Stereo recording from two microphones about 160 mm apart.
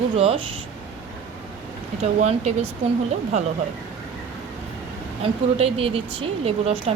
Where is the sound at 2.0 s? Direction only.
45° right (ahead or behind).